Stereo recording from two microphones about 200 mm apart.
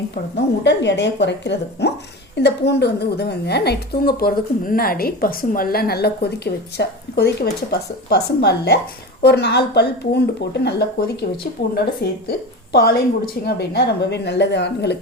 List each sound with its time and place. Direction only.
0.1 s a woman's voice: 60° left (ahead or behind)